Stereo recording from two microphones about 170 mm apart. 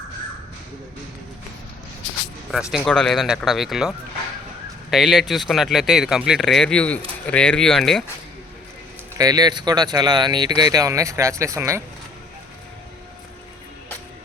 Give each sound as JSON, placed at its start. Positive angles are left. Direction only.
{"t": 2.5, "sound": "speech", "side_deg": -5}
{"t": 9.1, "sound": "speech", "side_deg": -20}